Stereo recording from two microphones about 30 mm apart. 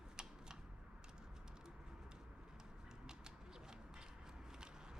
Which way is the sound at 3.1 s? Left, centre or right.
Right.